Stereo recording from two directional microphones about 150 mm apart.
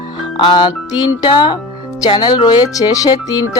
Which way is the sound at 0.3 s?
30° left (ahead or behind).